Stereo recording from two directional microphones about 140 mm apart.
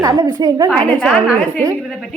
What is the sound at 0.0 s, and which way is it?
Speech, 30° right (ahead or behind).